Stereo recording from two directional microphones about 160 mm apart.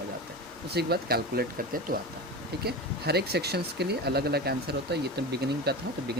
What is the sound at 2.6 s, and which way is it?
Speech, 90° right.